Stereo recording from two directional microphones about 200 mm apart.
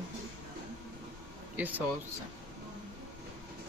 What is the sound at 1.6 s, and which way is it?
Speech, 10° right (ahead or behind).